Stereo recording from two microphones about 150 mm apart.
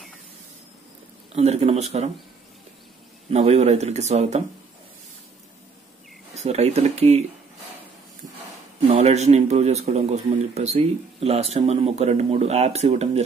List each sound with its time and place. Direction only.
1.3 s speech: 45° right (ahead or behind)
3.3 s speech: 45° right (ahead or behind)
6.3 s speech: 45° right (ahead or behind)
8.8 s speech: 45° right (ahead or behind)